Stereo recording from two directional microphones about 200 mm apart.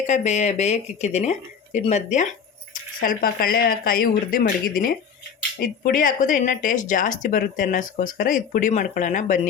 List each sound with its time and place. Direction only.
0.0 s speech: 35° left (ahead or behind)